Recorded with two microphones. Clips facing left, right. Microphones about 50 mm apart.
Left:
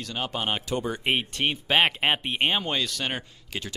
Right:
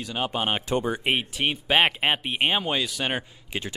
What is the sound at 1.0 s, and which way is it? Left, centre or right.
Speech, centre.